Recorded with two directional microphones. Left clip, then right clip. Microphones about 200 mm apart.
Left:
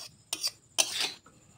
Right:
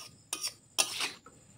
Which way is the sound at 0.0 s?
20° left (ahead or behind).